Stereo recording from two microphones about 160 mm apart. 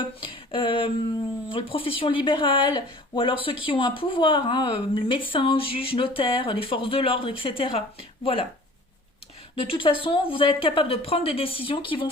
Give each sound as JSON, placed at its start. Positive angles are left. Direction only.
{"t": 0.2, "sound": "a sound", "side_deg": 30}
{"t": 1.5, "sound": "speech", "side_deg": 35}
{"t": 9.6, "sound": "speech", "side_deg": 35}